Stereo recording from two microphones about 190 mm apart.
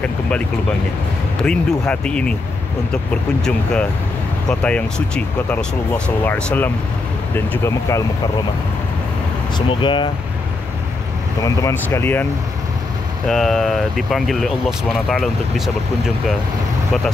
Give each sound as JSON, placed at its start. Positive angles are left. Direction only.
{"t": 1.4, "sound": "speech", "side_deg": 5}
{"t": 4.5, "sound": "speech", "side_deg": 5}
{"t": 9.7, "sound": "speech", "side_deg": 25}
{"t": 11.4, "sound": "speech", "side_deg": 15}
{"t": 13.3, "sound": "speech", "side_deg": 0}